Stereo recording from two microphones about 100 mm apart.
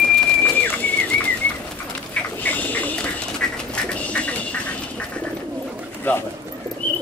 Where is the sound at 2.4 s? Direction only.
15° left (ahead or behind).